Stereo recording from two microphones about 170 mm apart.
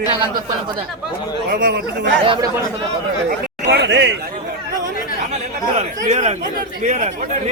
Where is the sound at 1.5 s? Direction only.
55° right (ahead or behind).